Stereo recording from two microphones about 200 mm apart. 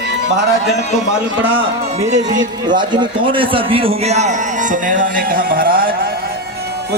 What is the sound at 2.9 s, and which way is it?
A man's voice, 25° right (ahead or behind).